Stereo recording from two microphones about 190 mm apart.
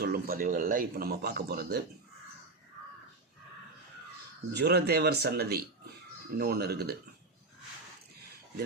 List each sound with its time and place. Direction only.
0.0 s a man's voice: 50° right (ahead or behind)
4.5 s speech: 60° right (ahead or behind)